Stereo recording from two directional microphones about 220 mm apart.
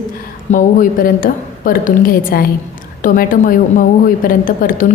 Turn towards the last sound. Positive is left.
turn(degrees=40)  # may be behind; listen again after turning